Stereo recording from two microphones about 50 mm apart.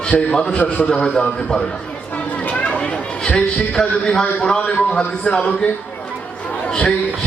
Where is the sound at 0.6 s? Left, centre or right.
Left.